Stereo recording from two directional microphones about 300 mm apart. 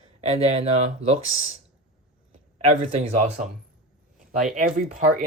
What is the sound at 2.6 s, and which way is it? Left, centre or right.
Speech, centre.